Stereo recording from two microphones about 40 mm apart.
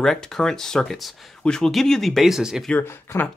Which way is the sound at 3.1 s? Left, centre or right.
Left.